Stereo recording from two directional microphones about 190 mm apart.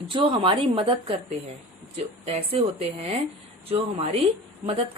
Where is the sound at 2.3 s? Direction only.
30° right (ahead or behind).